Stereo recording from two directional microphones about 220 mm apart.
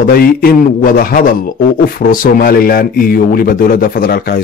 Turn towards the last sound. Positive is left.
turn(degrees=40)  # may be behind; listen again after turning